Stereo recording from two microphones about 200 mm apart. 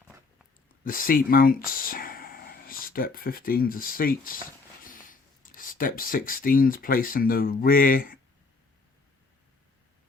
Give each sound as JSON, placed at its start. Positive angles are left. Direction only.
{"t": 0.9, "sound": "speech", "side_deg": 45}